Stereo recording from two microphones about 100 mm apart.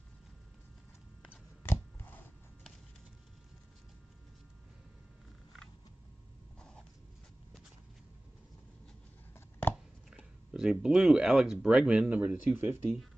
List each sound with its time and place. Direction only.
1.6 s a sound: 20° left (ahead or behind)
9.3 s chopping: 25° left (ahead or behind)
10.0 s speech: 5° right (ahead or behind)